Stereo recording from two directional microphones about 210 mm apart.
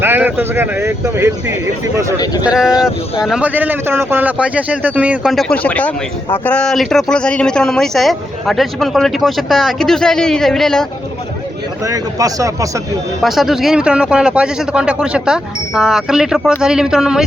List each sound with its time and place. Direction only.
0.0 s speech: 10° right (ahead or behind)
11.9 s speech: 15° right (ahead or behind)
13.2 s speech: centre (ahead or behind)